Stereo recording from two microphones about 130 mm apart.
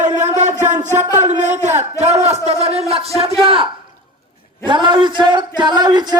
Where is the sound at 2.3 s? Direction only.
55° right (ahead or behind).